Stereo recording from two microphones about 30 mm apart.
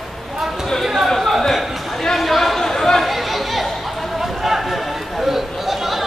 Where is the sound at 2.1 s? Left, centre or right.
Centre.